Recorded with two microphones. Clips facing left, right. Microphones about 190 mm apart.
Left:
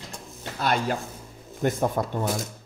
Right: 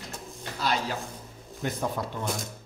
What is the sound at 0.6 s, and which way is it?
Speech, 55° left (ahead or behind).